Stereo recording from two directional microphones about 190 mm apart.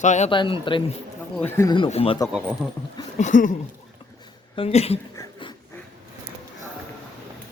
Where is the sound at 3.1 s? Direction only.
40° left (ahead or behind).